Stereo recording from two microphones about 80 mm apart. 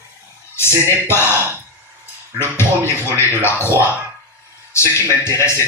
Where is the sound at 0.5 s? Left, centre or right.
Left.